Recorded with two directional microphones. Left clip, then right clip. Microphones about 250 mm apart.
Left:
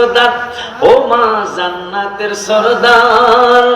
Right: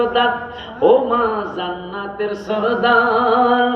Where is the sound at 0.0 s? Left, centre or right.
Right.